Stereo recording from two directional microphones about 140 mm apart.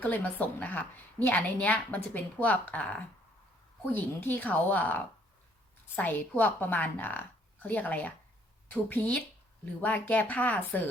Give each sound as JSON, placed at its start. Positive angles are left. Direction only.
{"t": 0.0, "sound": "a woman's voice", "side_deg": 10}